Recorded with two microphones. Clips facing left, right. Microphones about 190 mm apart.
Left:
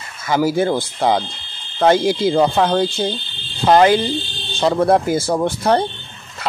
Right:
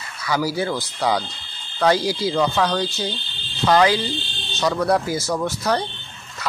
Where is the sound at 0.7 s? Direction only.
25° left (ahead or behind).